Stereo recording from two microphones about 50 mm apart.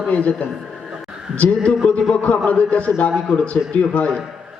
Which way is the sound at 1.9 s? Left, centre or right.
Left.